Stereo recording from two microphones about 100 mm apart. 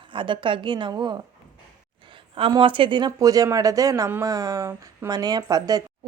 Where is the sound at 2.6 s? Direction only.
60° right (ahead or behind).